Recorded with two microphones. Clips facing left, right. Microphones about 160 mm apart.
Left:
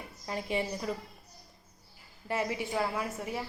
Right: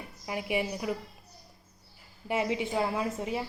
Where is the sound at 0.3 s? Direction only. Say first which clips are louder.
Right 2 dB; 10° right (ahead or behind).